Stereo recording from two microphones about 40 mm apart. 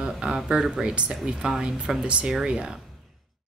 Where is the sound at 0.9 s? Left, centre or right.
Right.